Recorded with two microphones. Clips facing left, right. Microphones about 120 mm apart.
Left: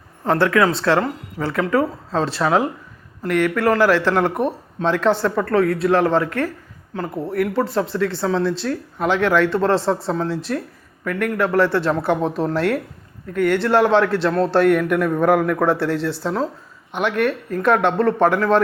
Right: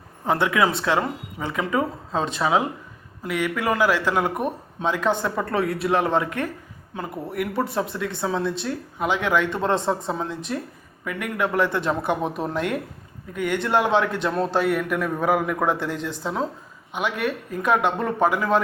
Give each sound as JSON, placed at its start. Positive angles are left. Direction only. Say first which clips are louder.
{"t": 0.3, "sound": "a man's voice", "louder": "left 4 dB", "side_deg": -15}